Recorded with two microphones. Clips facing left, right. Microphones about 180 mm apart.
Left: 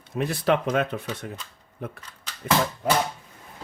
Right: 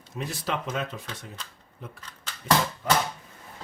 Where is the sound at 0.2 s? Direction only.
60° left (ahead or behind).